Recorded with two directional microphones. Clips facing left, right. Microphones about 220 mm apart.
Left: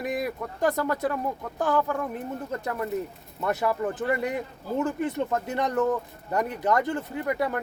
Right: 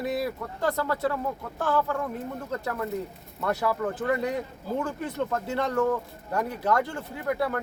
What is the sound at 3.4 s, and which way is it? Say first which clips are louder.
Speech: left 1 dB; 20° left (ahead or behind).